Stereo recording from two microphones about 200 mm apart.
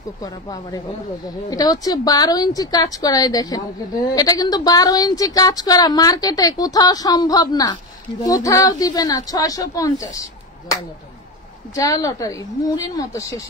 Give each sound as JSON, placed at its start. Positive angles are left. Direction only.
{"t": 0.2, "sound": "a woman's voice", "side_deg": 20}
{"t": 11.7, "sound": "a woman's voice", "side_deg": 15}